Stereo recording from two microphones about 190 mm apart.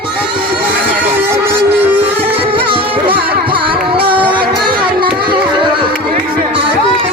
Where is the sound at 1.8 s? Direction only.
10° right (ahead or behind).